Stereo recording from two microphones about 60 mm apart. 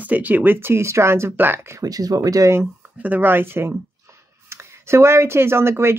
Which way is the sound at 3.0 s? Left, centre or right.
Right.